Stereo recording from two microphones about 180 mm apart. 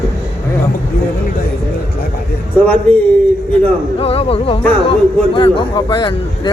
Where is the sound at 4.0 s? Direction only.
30° left (ahead or behind).